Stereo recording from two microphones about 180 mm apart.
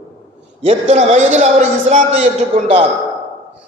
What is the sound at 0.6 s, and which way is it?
A man's voice, 40° right (ahead or behind).